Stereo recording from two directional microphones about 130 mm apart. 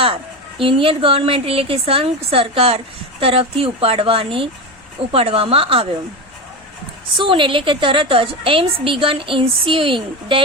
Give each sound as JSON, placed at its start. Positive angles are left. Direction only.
{"t": 0.6, "sound": "a woman's voice", "side_deg": -45}
{"t": 7.2, "sound": "a woman's voice", "side_deg": -40}